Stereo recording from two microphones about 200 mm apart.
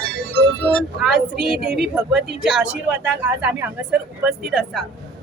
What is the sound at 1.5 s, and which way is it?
Speech, 50° right (ahead or behind).